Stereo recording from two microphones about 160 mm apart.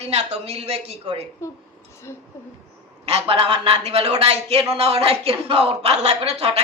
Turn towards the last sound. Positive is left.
turn(degrees=-40)  # may be behind; listen again after turning